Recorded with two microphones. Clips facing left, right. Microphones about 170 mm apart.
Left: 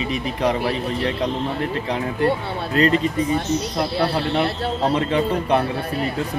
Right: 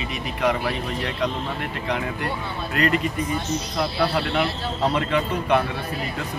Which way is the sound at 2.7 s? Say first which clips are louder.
Left 4 dB; 30° left (ahead or behind).